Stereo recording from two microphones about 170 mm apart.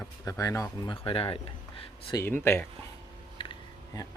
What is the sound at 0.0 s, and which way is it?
Speech, 20° left (ahead or behind).